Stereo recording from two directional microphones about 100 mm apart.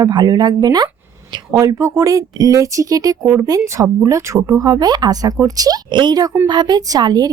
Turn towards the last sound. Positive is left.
turn(degrees=-45)  # may be behind; listen again after turning